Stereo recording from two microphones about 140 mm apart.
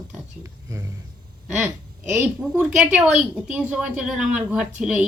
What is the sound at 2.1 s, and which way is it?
A woman's voice, 10° right (ahead or behind).